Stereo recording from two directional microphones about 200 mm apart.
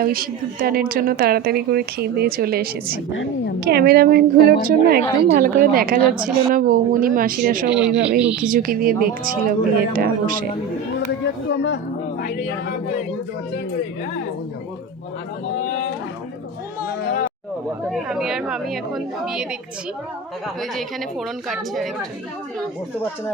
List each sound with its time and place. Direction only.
0.0 s a woman's voice: 45° right (ahead or behind)
3.1 s a woman's voice: 70° left (ahead or behind)
3.6 s a woman's voice: 55° right (ahead or behind)
7.7 s a woman's voice: 5° right (ahead or behind)
8.4 s a woman's voice: 45° right (ahead or behind)
11.2 s speech: 60° left (ahead or behind)
17.9 s a woman's voice: centre (ahead or behind)
20.6 s a woman's voice: centre (ahead or behind)